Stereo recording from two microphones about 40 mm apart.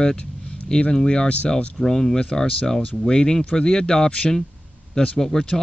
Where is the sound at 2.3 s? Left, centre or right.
Left.